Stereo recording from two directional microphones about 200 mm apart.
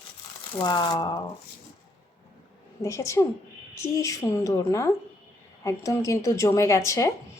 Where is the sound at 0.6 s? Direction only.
25° left (ahead or behind).